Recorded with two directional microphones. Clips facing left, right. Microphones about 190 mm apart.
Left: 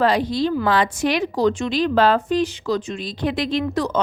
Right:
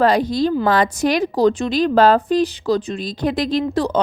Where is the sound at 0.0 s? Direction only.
45° right (ahead or behind).